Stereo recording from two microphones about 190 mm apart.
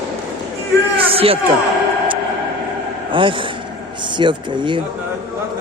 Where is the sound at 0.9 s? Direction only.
30° right (ahead or behind).